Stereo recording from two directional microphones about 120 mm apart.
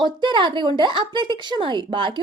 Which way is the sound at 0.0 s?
40° right (ahead or behind).